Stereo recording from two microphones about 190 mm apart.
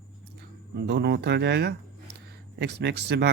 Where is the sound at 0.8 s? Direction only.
65° right (ahead or behind).